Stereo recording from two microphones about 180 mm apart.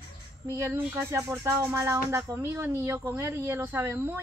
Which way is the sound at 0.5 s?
15° right (ahead or behind).